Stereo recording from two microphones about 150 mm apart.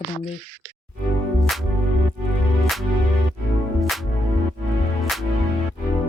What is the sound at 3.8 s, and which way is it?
Music, centre (ahead or behind).